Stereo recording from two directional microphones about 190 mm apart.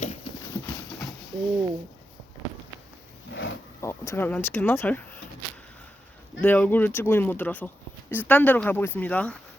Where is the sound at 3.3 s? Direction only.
75° left (ahead or behind).